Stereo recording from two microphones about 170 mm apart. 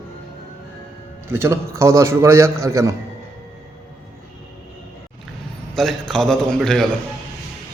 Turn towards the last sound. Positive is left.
turn(degrees=0)  # may be behind; listen again after turning